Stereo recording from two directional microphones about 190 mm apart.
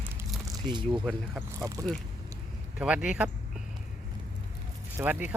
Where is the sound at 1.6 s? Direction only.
15° right (ahead or behind).